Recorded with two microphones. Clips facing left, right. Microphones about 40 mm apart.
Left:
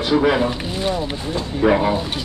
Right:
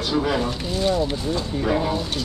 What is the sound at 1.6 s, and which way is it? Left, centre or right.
Speech, left.